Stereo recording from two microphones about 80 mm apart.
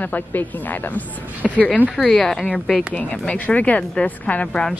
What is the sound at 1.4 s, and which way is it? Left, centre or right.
Speech, centre.